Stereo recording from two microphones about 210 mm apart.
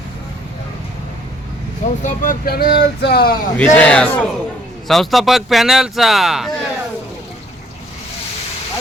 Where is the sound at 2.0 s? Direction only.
40° left (ahead or behind).